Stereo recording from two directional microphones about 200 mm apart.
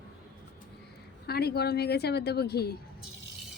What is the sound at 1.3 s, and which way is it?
A woman's voice, 55° left (ahead or behind).